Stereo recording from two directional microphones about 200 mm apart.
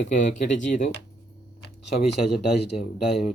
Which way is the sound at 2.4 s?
Centre (ahead or behind).